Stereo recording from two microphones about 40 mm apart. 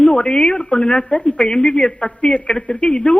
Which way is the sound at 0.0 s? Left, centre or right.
Left.